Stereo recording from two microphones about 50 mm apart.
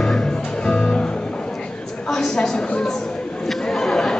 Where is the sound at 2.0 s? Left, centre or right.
Centre.